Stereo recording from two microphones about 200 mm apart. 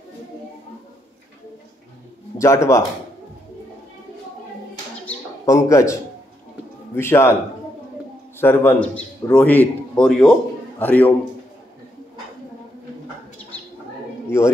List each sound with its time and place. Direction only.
2.3 s a man's voice: 15° left (ahead or behind)
5.0 s bird: 15° left (ahead or behind)
7.0 s a man's voice: 10° left (ahead or behind)
8.4 s a man's voice: 10° left (ahead or behind)